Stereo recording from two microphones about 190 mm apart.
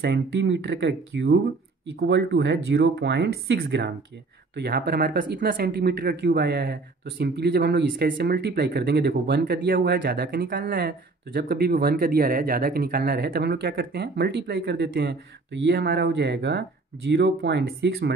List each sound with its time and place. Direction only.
0.0 s speech: 65° right (ahead or behind)